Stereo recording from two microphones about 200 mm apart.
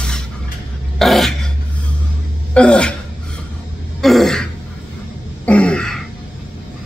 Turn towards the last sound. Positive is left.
turn(degrees=5)  # may be behind; listen again after turning